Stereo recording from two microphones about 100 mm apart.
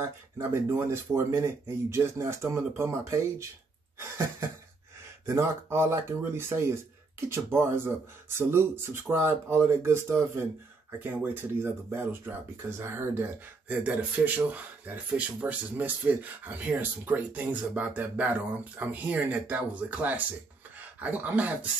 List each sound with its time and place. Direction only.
0.0 s speech: 25° right (ahead or behind)
5.2 s speech: 25° right (ahead or behind)